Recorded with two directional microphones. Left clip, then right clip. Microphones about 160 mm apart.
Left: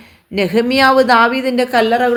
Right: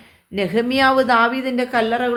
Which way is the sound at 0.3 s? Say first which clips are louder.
Left 5 dB; 30° left (ahead or behind).